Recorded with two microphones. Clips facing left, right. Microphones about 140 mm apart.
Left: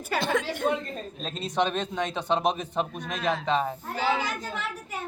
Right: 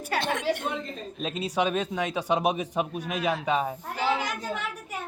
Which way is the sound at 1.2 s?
10° right (ahead or behind).